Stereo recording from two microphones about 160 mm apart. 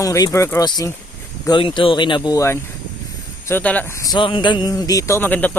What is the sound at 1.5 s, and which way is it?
Speech, 30° left (ahead or behind).